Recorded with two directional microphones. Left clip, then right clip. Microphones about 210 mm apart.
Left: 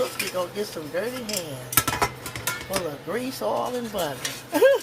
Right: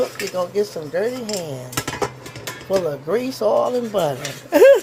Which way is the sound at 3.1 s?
45° right (ahead or behind).